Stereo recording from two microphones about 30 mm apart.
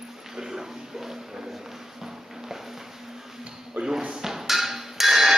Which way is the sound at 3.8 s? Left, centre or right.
Right.